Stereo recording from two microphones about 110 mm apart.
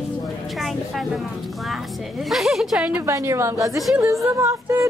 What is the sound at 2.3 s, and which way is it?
Speech, centre (ahead or behind).